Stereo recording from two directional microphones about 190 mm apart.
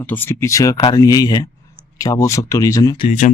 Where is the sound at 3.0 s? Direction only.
40° left (ahead or behind).